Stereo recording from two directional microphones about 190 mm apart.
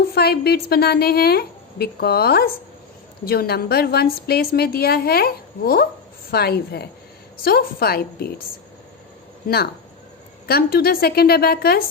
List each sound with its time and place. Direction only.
0.1 s a woman's voice: 55° left (ahead or behind)
10.4 s a woman's voice: 55° left (ahead or behind)